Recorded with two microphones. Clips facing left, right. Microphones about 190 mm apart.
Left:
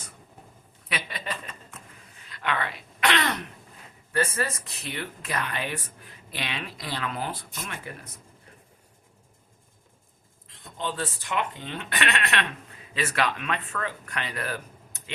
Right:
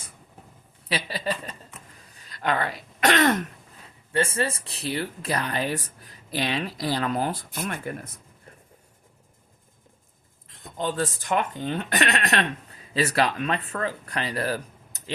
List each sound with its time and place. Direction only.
0.9 s speech: 35° right (ahead or behind)
4.1 s speech: 25° right (ahead or behind)
7.5 s speech: 55° right (ahead or behind)
10.8 s speech: 45° right (ahead or behind)